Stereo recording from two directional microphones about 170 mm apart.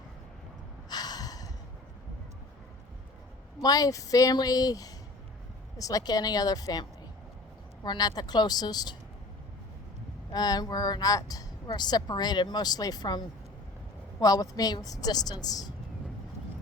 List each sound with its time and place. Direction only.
0.9 s gasp: 25° left (ahead or behind)
3.6 s speech: 20° left (ahead or behind)
7.9 s speech: 25° left (ahead or behind)
10.3 s speech: 25° left (ahead or behind)